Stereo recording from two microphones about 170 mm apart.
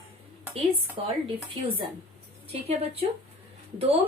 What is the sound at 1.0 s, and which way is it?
Speech, 30° right (ahead or behind).